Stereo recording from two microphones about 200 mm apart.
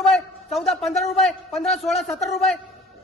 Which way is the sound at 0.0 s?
Centre (ahead or behind).